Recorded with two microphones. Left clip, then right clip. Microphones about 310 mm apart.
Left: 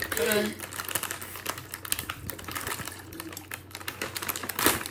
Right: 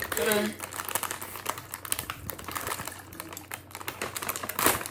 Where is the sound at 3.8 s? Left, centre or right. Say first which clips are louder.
Even; centre.